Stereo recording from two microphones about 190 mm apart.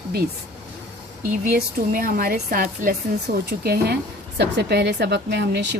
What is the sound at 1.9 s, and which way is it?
A woman's voice, 45° right (ahead or behind).